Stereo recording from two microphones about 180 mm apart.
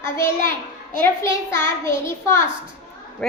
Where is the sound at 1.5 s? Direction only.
15° left (ahead or behind).